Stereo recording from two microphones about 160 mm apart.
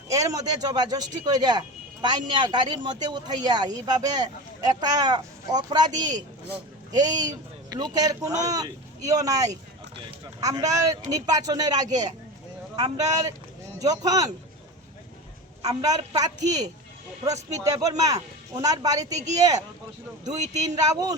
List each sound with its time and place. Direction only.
0.1 s speech: 20° right (ahead or behind)
15.6 s speech: 20° right (ahead or behind)
20.7 s speech: 20° right (ahead or behind)